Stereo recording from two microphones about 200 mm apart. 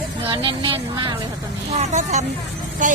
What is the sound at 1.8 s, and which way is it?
Speech, 35° right (ahead or behind).